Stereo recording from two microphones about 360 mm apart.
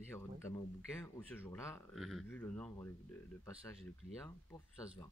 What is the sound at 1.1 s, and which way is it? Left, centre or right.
Speech, centre.